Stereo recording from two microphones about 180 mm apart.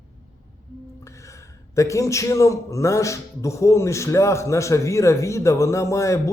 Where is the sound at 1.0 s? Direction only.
15° left (ahead or behind).